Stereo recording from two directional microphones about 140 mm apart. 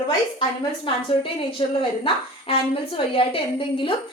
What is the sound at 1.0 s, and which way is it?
A woman's voice, 40° left (ahead or behind).